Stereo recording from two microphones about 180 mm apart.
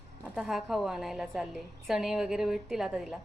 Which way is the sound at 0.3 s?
Centre (ahead or behind).